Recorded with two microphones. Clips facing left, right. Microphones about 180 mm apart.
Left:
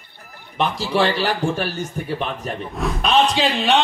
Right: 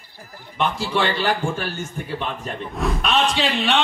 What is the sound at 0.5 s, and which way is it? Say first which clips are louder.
A man's voice: left 2 dB; 35° left (ahead or behind).